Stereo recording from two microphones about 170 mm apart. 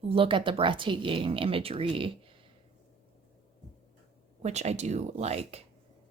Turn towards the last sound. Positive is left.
turn(degrees=-35)  # may be behind; listen again after turning